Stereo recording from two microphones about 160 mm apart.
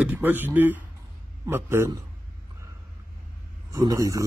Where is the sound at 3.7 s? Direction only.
20° right (ahead or behind).